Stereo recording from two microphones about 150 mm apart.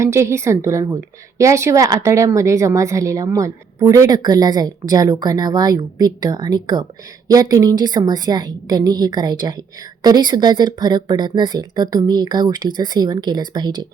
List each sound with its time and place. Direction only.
0.0 s a woman's voice: 20° right (ahead or behind)